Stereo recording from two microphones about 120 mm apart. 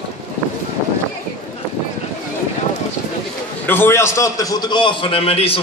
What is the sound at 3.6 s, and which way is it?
A man's voice, 15° left (ahead or behind).